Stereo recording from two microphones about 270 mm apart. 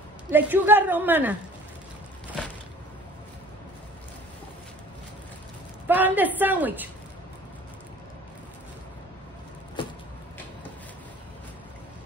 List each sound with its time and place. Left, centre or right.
0.3 s a woman's voice: centre
5.9 s a woman's voice: centre
9.8 s vehicle: centre